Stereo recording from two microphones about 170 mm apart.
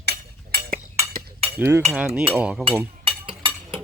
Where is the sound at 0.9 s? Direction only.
35° right (ahead or behind).